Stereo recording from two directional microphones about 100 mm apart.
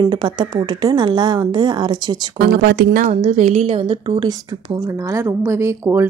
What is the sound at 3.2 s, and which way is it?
Speech, 90° right.